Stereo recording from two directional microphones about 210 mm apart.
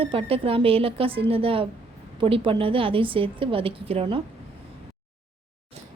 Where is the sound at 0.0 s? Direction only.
25° right (ahead or behind).